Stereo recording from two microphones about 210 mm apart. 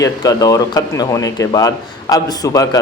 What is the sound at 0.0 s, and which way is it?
A man's voice, 15° left (ahead or behind).